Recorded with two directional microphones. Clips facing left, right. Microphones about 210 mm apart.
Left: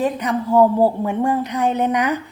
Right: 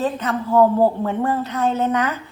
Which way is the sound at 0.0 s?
15° left (ahead or behind).